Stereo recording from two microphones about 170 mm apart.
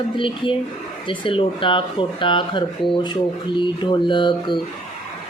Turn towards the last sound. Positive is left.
turn(degrees=25)  # may be behind; listen again after turning